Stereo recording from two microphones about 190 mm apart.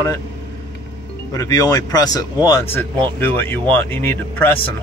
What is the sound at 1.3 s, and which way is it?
Speech, 20° left (ahead or behind).